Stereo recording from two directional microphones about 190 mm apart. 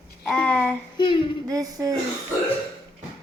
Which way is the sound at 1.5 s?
20° right (ahead or behind).